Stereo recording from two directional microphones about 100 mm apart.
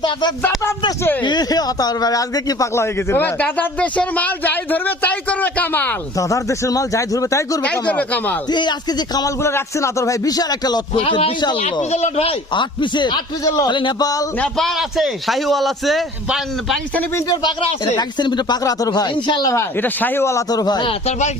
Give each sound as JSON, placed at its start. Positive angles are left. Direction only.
{"t": 0.0, "sound": "a man's voice", "side_deg": 45}
{"t": 2.7, "sound": "a man's voice", "side_deg": 25}
{"t": 6.1, "sound": "a man's voice", "side_deg": 35}
{"t": 7.6, "sound": "a man's voice", "side_deg": 15}
{"t": 8.4, "sound": "a man's voice", "side_deg": 45}
{"t": 9.4, "sound": "a man's voice", "side_deg": 25}
{"t": 10.9, "sound": "a man's voice", "side_deg": 70}
{"t": 11.9, "sound": "speech", "side_deg": 90}
{"t": 12.5, "sound": "a man's voice", "side_deg": 50}
{"t": 14.3, "sound": "a man's voice", "side_deg": 10}
{"t": 17.9, "sound": "a man's voice", "side_deg": 45}
{"t": 19.5, "sound": "a man's voice", "side_deg": 20}
{"t": 20.5, "sound": "a man's voice", "side_deg": 40}